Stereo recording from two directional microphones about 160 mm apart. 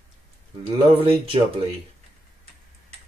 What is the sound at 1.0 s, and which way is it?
Speech, 35° right (ahead or behind).